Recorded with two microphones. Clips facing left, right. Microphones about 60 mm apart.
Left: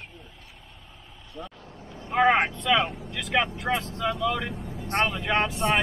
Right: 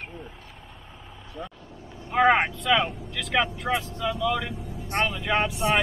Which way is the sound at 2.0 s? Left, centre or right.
Centre.